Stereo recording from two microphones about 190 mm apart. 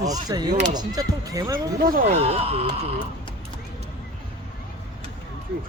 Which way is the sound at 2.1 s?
30° right (ahead or behind).